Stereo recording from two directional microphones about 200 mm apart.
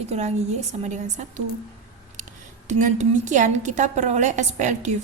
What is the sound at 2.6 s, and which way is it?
A woman's voice, 35° right (ahead or behind).